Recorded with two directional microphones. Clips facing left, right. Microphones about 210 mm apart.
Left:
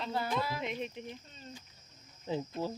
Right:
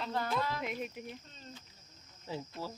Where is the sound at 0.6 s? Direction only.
5° right (ahead or behind).